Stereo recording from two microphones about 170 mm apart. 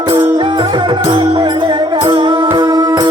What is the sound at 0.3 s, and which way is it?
Music, 25° right (ahead or behind).